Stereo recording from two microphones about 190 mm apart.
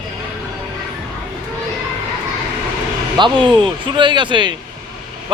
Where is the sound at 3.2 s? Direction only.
25° right (ahead or behind).